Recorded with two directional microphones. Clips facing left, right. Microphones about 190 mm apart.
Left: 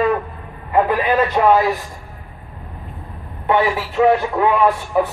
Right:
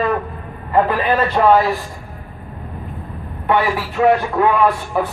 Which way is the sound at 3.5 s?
20° left (ahead or behind).